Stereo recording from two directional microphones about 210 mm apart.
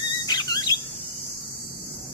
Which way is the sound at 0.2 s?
20° left (ahead or behind).